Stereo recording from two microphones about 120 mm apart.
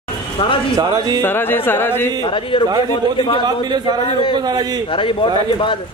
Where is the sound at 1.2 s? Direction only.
20° left (ahead or behind).